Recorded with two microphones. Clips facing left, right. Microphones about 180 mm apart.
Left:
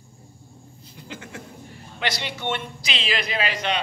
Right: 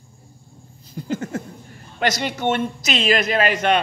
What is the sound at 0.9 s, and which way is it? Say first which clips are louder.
Speech: right 13 dB; 40° right (ahead or behind).